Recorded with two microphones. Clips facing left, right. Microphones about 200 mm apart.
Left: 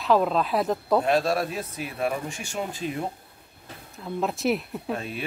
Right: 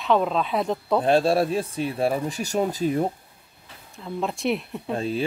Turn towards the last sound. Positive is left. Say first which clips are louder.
# right 7 dB
turn(degrees=-30)  # may be behind; listen again after turning